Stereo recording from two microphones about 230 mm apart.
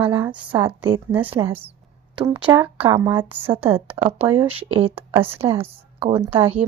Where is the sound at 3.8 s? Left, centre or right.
Right.